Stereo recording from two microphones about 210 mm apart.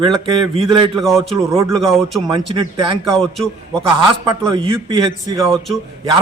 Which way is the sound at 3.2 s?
Centre (ahead or behind).